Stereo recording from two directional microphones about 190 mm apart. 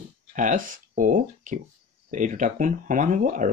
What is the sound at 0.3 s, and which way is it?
Speech, 45° right (ahead or behind).